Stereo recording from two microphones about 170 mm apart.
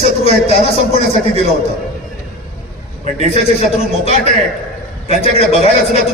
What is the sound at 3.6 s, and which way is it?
A man's voice, 35° left (ahead or behind).